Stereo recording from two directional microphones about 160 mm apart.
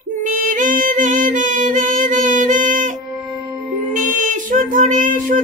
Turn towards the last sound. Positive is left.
turn(degrees=-55)  # may be behind; listen again after turning